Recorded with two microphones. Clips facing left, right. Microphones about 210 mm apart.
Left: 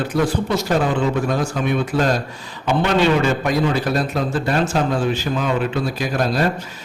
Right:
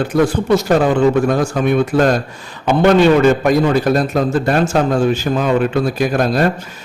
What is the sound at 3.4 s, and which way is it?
A man's voice, 50° right (ahead or behind).